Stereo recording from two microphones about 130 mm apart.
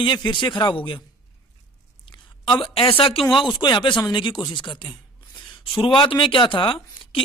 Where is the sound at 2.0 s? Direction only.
40° left (ahead or behind).